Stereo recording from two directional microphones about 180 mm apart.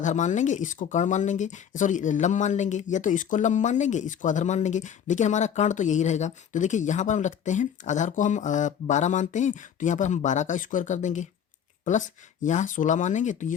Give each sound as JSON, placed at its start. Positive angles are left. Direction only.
{"t": 0.0, "sound": "speech", "side_deg": 40}